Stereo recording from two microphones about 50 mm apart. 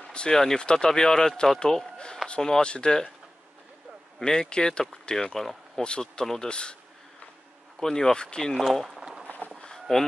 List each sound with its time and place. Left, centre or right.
0.1 s a sound: centre
0.6 s speech: centre
4.2 s speech: centre
6.2 s speech: centre
6.5 s speech: left
7.8 s speech: centre
8.4 s speech: centre
9.0 s a sound: centre
9.6 s a sound: centre